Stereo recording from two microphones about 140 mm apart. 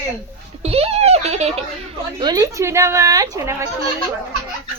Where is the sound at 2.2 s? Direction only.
30° right (ahead or behind).